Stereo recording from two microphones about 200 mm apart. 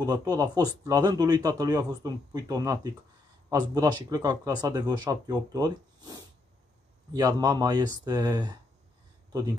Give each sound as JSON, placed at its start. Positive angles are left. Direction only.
{"t": 0.0, "sound": "speech", "side_deg": -20}